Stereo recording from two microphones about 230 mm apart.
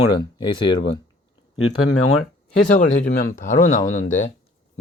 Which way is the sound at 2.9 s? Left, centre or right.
Left.